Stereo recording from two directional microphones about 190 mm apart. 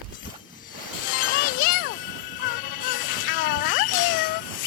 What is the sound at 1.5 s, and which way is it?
Jingle, 50° left (ahead or behind).